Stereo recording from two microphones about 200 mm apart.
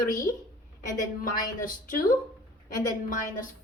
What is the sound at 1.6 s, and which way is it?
A woman's voice, 40° left (ahead or behind).